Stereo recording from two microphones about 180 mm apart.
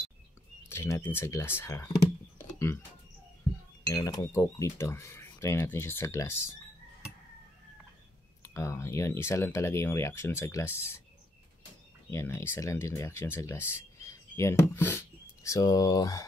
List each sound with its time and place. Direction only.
0.7 s speech: 15° left (ahead or behind)
2.3 s music: 15° left (ahead or behind)
3.8 s speech: 20° left (ahead or behind)
8.4 s speech: 15° left (ahead or behind)
12.1 s speech: 15° left (ahead or behind)